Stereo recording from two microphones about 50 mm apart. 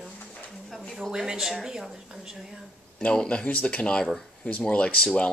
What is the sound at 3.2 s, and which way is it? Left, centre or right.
Speech, left.